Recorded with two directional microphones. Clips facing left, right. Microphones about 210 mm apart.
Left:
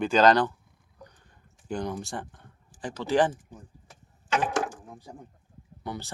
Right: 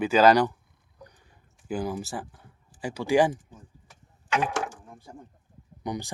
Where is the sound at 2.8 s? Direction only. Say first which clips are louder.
Right 2 dB; 10° right (ahead or behind).